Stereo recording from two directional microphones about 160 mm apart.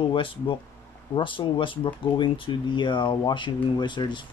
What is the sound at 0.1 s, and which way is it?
Speech, 30° left (ahead or behind).